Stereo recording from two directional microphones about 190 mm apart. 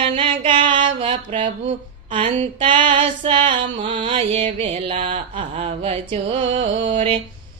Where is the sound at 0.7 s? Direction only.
25° right (ahead or behind).